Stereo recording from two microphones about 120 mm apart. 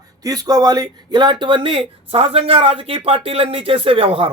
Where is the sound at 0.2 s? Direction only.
30° right (ahead or behind).